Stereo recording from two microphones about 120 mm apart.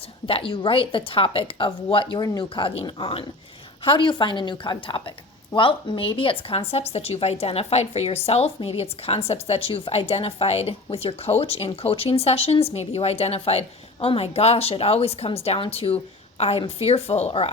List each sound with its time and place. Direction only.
0.3 s a woman's voice: 50° left (ahead or behind)